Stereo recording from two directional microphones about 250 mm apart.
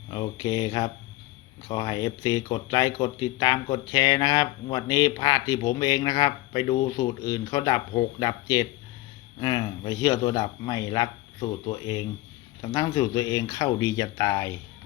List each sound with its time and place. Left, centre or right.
0.1 s speech: centre